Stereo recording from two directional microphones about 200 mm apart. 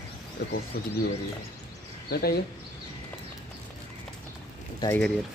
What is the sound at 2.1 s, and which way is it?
Speech, 50° left (ahead or behind).